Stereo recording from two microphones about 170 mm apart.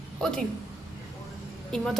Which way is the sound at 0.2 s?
5° left (ahead or behind).